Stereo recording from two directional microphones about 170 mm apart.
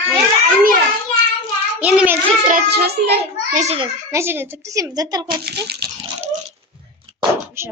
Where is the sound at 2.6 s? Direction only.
70° right (ahead or behind).